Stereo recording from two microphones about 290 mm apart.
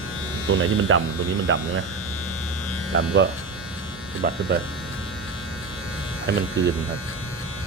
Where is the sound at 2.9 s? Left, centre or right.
Right.